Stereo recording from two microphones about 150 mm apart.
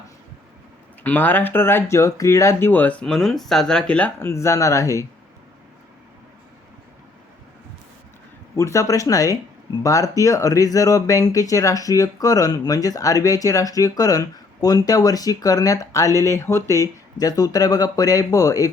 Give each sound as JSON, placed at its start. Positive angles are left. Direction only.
{"t": 1.0, "sound": "speech", "side_deg": 15}
{"t": 8.5, "sound": "speech", "side_deg": 20}